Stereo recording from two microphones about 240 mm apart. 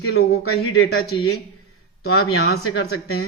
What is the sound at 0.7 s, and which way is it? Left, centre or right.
Speech, left.